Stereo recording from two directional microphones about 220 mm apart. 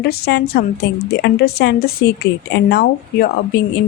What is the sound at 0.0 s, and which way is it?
Speech, 50° left (ahead or behind).